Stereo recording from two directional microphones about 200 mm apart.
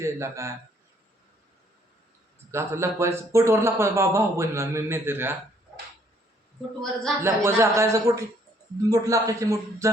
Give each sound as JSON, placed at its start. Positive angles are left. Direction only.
{"t": 0.0, "sound": "speech", "side_deg": -15}
{"t": 2.5, "sound": "speech", "side_deg": -15}
{"t": 7.2, "sound": "speech", "side_deg": -10}